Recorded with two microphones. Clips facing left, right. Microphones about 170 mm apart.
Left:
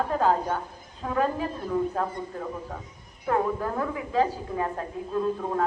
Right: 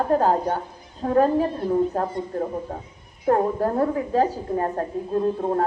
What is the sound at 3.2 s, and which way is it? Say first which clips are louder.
A woman's voice: right 5 dB; 40° right (ahead or behind).